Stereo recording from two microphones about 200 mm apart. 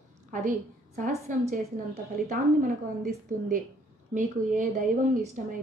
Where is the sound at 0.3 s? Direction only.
40° right (ahead or behind).